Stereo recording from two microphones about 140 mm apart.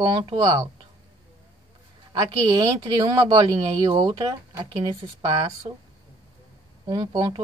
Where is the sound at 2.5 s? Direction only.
30° right (ahead or behind).